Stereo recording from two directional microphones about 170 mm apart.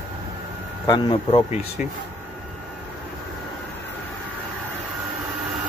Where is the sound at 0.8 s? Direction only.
25° left (ahead or behind).